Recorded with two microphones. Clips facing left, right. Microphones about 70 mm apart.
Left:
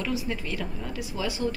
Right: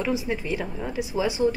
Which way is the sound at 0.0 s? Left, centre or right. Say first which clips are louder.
Right 4 dB; right.